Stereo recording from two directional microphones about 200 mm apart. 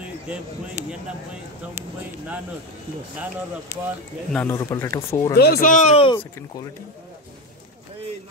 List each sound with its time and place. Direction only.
4.3 s speech: 10° left (ahead or behind)
5.3 s speech: 50° left (ahead or behind); by 6.6 s 25° left (ahead or behind)